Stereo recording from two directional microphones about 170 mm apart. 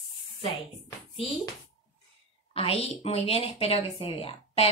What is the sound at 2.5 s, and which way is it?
Speech, 35° left (ahead or behind).